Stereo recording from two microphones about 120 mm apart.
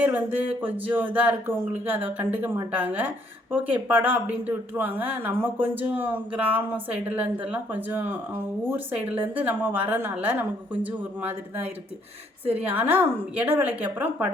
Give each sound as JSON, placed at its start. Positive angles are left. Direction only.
{"t": 0.0, "sound": "speech", "side_deg": -15}